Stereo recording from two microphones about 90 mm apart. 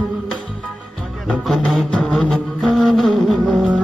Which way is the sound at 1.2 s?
5° left (ahead or behind).